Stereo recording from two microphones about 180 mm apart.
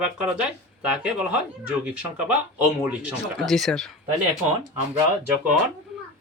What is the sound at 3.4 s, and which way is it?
Speech, centre (ahead or behind).